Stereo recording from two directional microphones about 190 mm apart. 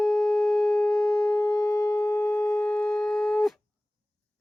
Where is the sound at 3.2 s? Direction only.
Centre (ahead or behind).